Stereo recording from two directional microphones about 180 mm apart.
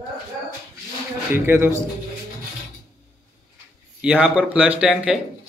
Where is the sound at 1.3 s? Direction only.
15° right (ahead or behind).